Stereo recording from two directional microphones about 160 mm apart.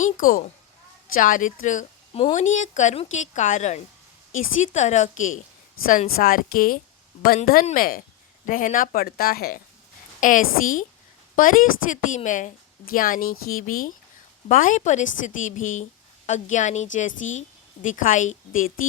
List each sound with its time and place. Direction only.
0.0 s a woman's voice: 60° left (ahead or behind)
6.1 s a woman's voice: 65° left (ahead or behind)
10.2 s a woman's voice: 55° left (ahead or behind)